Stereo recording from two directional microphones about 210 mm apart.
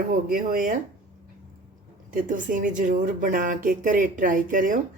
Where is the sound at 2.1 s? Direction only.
40° right (ahead or behind).